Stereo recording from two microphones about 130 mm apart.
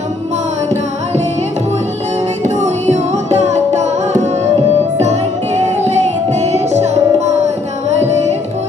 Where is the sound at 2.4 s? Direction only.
60° right (ahead or behind).